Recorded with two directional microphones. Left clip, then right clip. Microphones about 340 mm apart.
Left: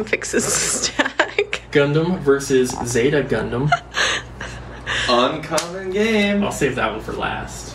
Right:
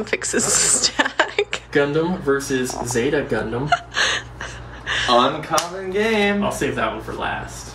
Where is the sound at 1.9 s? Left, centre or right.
Centre.